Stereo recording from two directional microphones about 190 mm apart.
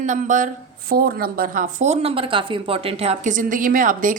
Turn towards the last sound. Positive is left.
turn(degrees=-45)  # may be behind; listen again after turning